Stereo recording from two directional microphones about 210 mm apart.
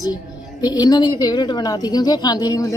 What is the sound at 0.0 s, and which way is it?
A woman's voice, 20° left (ahead or behind).